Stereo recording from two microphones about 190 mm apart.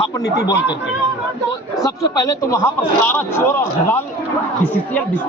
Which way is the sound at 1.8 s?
20° left (ahead or behind).